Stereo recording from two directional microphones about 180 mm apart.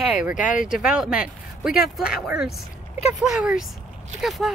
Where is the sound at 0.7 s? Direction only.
5° right (ahead or behind).